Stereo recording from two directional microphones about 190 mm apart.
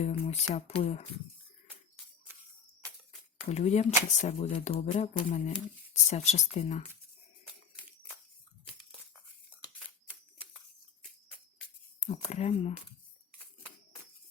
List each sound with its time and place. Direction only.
0.0 s speech: 35° left (ahead or behind)
3.5 s speech: 35° left (ahead or behind)
9.5 s a sound: 5° right (ahead or behind)
12.0 s speech: 35° left (ahead or behind)